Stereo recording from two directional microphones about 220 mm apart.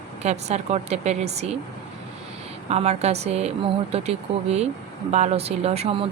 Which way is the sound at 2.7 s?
30° right (ahead or behind).